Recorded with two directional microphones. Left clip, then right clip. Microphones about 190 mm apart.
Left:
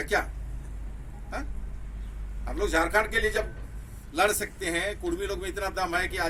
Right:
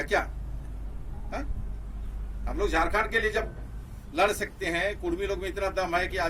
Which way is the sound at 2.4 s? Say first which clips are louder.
Even; 15° right (ahead or behind).